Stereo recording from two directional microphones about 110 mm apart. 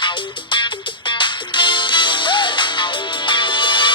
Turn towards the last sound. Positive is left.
turn(degrees=45)  # may be behind; listen again after turning